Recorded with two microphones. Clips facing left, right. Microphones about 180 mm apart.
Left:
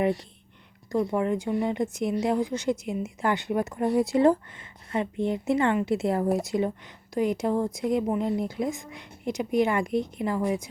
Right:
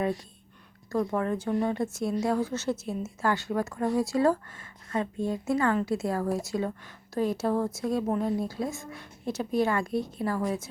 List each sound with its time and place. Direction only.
0.9 s a woman's voice: 15° left (ahead or behind)